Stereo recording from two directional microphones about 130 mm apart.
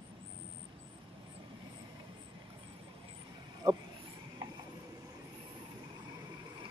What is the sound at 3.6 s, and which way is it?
Speech, 30° right (ahead or behind).